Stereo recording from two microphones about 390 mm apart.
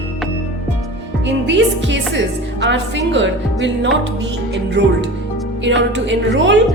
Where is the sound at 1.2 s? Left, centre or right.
Right.